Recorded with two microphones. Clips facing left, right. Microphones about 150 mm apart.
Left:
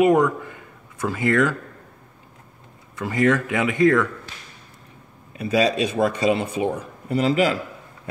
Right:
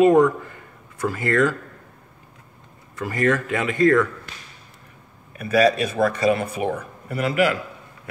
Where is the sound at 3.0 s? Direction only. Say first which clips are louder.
Left 2 dB; 15° left (ahead or behind).